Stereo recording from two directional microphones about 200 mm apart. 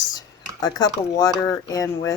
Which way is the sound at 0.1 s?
20° left (ahead or behind).